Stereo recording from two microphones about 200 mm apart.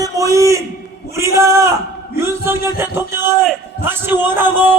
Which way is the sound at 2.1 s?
10° right (ahead or behind).